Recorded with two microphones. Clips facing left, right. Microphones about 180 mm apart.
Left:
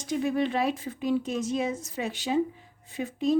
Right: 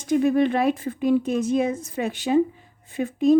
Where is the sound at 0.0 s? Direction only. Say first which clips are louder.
Right 7 dB; 55° right (ahead or behind).